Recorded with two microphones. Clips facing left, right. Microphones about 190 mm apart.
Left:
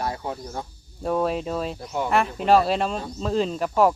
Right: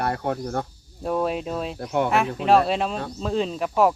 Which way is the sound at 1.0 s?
Centre (ahead or behind).